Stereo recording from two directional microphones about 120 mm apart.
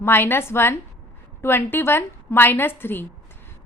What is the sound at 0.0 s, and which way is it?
A woman's voice, 20° left (ahead or behind).